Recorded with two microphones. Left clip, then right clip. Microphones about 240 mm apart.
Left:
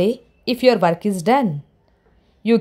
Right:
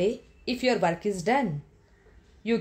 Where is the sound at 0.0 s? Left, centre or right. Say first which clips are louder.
Left 8 dB; left.